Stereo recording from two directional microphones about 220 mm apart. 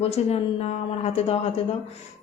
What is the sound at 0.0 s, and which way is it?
A woman's voice, 25° left (ahead or behind).